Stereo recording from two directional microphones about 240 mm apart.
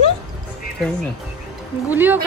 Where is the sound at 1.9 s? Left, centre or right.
Centre.